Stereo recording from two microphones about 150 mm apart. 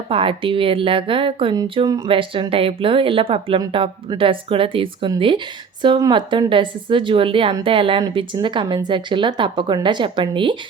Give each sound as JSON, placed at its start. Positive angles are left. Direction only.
{"t": 0.1, "sound": "speech", "side_deg": -35}